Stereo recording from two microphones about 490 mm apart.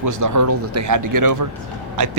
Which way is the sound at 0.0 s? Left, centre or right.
Right.